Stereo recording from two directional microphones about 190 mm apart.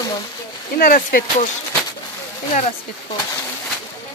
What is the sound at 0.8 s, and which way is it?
Speech, 50° left (ahead or behind).